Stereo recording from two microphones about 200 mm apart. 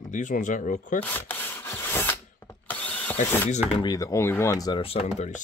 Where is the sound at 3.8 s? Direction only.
20° left (ahead or behind); by 5.4 s 35° left (ahead or behind).